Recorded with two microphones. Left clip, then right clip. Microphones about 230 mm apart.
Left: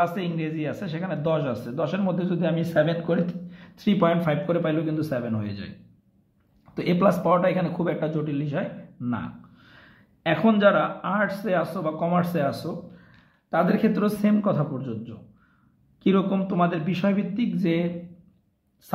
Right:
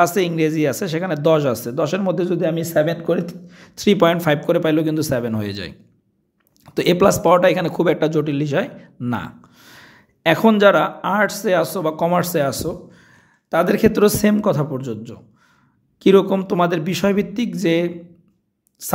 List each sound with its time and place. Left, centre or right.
0.0 s speech: right